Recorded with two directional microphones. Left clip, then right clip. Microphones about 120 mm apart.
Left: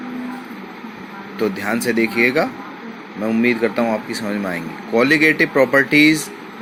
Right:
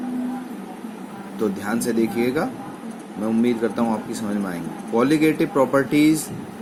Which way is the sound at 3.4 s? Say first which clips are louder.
Left 5 dB; 15° left (ahead or behind).